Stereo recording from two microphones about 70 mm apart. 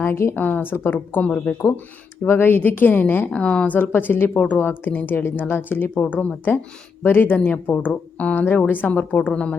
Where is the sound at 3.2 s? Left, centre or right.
Centre.